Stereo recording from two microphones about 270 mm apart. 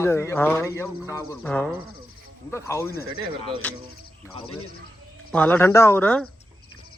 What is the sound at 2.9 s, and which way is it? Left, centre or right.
Speech, left.